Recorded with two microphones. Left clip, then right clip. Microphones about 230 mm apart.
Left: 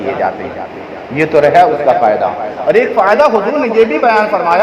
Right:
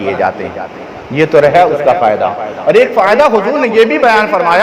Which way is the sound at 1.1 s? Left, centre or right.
Right.